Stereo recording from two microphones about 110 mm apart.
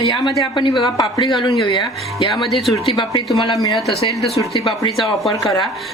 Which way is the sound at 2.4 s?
Centre (ahead or behind).